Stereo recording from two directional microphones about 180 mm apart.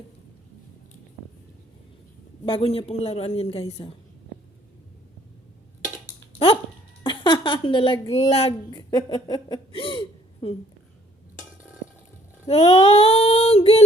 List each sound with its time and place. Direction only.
2.5 s a woman's voice: 30° left (ahead or behind)
7.0 s a sound: 25° left (ahead or behind)
8.1 s a woman's voice: 35° left (ahead or behind)
8.8 s speech: 25° left (ahead or behind)
12.5 s a woman's voice: 35° left (ahead or behind)